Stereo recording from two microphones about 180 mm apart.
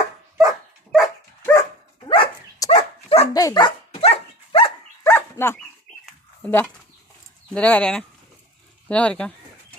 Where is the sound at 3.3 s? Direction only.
20° left (ahead or behind).